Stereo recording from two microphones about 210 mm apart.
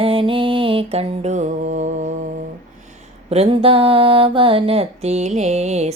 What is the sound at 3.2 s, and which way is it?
Mantra, 30° right (ahead or behind).